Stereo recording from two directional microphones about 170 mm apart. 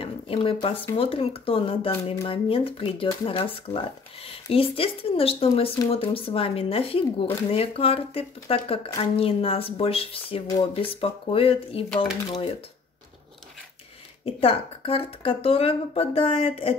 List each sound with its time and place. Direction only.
0.0 s a sound: 35° left (ahead or behind)
0.9 s speech: 35° left (ahead or behind)
14.2 s speech: 35° left (ahead or behind)